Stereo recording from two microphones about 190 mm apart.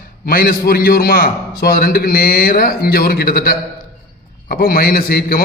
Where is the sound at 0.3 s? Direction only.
50° left (ahead or behind).